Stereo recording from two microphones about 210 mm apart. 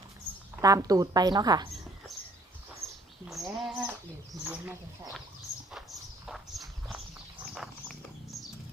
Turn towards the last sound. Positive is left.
turn(degrees=0)  # may be behind; listen again after turning